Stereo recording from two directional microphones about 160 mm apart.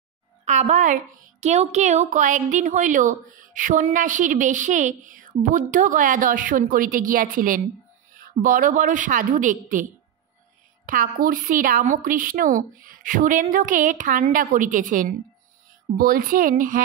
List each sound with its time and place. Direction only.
0.5 s a woman's voice: 50° right (ahead or behind)
10.9 s a woman's voice: 60° right (ahead or behind)